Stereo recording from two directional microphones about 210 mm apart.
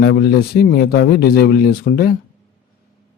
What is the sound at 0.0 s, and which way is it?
Speech, 50° left (ahead or behind).